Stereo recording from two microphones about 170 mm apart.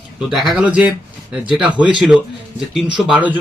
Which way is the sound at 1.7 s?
25° left (ahead or behind).